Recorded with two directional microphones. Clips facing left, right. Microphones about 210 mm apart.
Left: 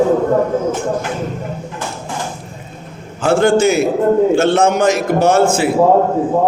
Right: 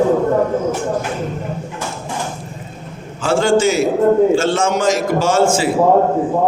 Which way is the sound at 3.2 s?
60° left (ahead or behind).